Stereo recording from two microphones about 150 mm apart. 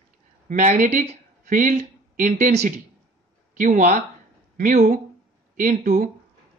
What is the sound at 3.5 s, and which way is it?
Speech, 55° right (ahead or behind).